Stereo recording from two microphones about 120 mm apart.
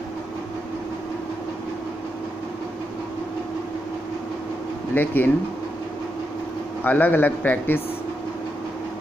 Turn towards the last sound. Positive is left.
turn(degrees=15)  # may be behind; listen again after turning